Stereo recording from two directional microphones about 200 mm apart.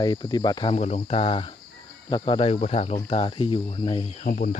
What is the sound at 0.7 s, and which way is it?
Speech, 35° left (ahead or behind).